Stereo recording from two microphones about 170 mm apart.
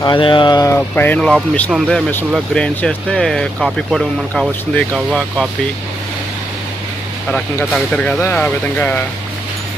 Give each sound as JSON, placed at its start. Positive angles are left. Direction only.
{"t": 0.0, "sound": "speech", "side_deg": 30}
{"t": 7.7, "sound": "speech", "side_deg": 5}